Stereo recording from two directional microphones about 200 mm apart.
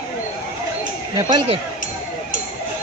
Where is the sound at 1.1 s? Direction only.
20° right (ahead or behind).